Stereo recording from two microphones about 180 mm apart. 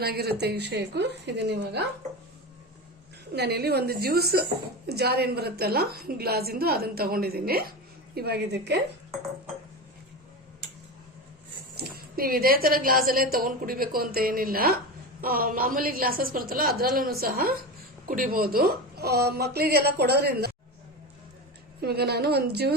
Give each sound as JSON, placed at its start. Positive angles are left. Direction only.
{"t": 0.0, "sound": "a woman's voice", "side_deg": -60}
{"t": 3.3, "sound": "a woman's voice", "side_deg": -65}
{"t": 11.7, "sound": "a woman's voice", "side_deg": -60}
{"t": 21.8, "sound": "a woman's voice", "side_deg": -60}